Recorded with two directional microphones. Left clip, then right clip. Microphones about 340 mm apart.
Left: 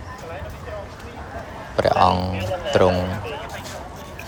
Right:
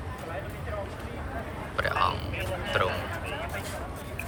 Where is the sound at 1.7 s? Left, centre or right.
Centre.